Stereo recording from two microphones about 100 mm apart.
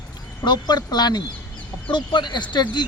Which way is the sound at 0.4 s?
45° left (ahead or behind).